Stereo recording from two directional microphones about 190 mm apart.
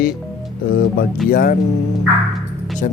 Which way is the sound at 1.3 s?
50° left (ahead or behind).